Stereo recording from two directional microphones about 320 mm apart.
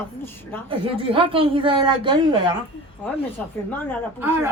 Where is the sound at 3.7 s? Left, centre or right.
Centre.